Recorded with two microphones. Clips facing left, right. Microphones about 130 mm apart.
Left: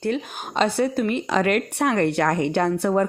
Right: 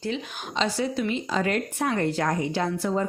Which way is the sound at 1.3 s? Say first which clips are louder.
Left 5 dB; 70° left (ahead or behind).